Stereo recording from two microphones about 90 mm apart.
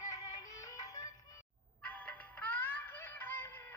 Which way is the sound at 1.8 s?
15° left (ahead or behind).